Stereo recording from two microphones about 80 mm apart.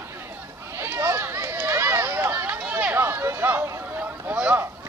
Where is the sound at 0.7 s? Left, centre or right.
Right.